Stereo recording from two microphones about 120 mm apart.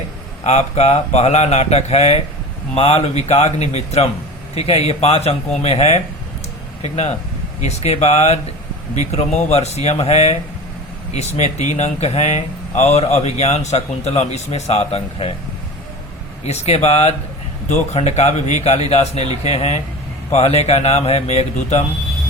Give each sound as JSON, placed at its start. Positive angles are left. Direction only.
{"t": 0.4, "sound": "speech", "side_deg": 65}
{"t": 16.4, "sound": "speech", "side_deg": 65}